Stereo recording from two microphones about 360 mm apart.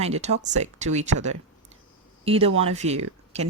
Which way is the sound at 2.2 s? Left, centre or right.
Centre.